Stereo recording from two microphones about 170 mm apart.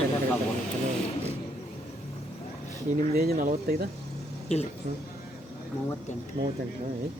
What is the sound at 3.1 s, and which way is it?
Speech, 60° right (ahead or behind).